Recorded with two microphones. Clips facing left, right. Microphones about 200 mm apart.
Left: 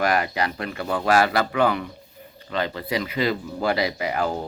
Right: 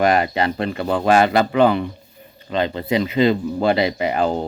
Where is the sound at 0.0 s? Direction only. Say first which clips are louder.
Right 5 dB; 25° right (ahead or behind).